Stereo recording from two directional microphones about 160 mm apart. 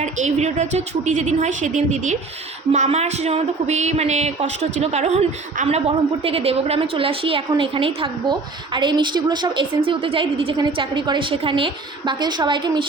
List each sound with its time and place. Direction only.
0.0 s a woman's voice: 45° right (ahead or behind); by 12.9 s 30° right (ahead or behind)